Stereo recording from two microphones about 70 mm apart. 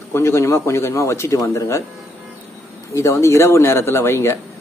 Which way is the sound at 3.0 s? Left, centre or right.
Left.